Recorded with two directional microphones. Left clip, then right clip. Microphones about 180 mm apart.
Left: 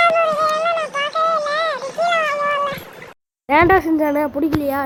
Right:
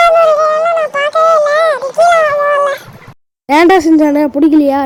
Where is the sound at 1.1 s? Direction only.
45° right (ahead or behind).